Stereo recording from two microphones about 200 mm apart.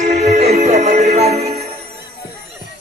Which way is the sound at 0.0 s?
35° right (ahead or behind).